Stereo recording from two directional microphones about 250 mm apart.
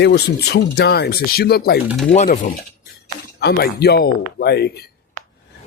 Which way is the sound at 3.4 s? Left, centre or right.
Left.